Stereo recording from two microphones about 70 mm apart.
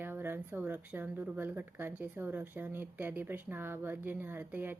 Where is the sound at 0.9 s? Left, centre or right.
Right.